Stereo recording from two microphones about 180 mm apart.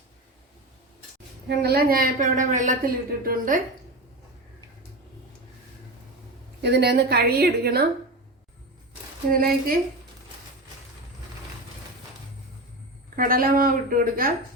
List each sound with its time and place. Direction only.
1.5 s a woman's voice: 65° right (ahead or behind)
6.6 s a woman's voice: 65° right (ahead or behind)
9.3 s a woman's voice: 55° right (ahead or behind)
13.1 s a woman's voice: 55° right (ahead or behind)